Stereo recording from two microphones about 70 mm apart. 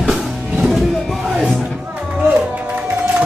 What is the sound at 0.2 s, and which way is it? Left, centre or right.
Music, centre.